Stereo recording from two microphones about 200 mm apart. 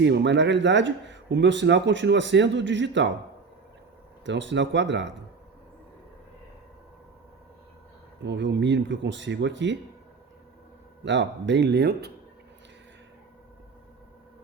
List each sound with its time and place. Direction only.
0.0 s speech: 60° right (ahead or behind)
4.3 s speech: 65° right (ahead or behind)
8.2 s speech: 60° right (ahead or behind)
11.0 s speech: 65° right (ahead or behind)